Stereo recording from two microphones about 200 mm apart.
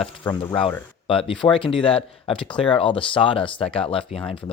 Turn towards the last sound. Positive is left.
turn(degrees=25)  # may be behind; listen again after turning